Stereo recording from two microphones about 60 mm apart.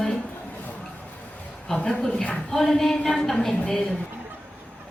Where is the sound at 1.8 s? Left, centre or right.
Centre.